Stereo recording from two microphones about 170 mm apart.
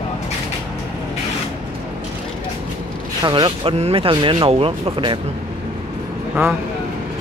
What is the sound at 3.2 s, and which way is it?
Speech, 25° right (ahead or behind).